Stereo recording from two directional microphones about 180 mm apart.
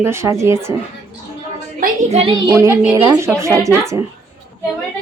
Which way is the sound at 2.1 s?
30° right (ahead or behind).